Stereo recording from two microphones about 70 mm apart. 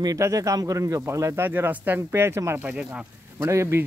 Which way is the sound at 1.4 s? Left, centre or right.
Right.